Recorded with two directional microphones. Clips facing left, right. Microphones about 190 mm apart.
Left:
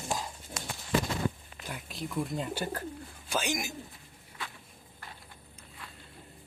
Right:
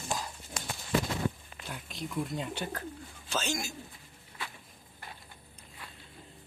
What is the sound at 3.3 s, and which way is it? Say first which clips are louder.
Speech: left 2 dB; 15° left (ahead or behind).